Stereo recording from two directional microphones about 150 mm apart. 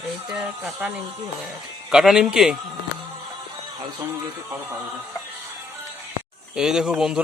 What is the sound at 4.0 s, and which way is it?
Speech, 20° right (ahead or behind).